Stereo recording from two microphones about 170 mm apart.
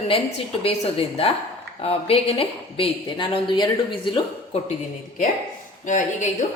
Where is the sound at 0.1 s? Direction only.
35° left (ahead or behind).